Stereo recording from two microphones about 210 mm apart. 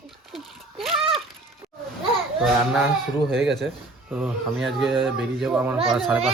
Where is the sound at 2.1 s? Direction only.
Centre (ahead or behind).